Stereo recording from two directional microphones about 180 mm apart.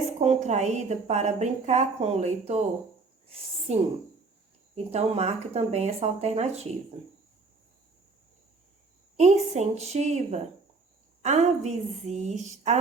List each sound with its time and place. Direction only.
0.2 s a woman's voice: 40° right (ahead or behind)
3.7 s a woman's voice: 35° right (ahead or behind)
9.1 s a woman's voice: 40° right (ahead or behind)